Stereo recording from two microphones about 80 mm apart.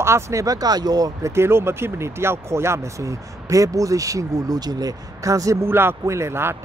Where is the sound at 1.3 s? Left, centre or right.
Right.